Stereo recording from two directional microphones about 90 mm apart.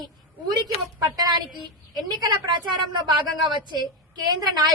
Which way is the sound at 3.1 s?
55° right (ahead or behind).